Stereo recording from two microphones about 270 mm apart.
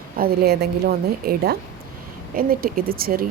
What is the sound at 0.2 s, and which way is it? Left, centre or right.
Speech, right.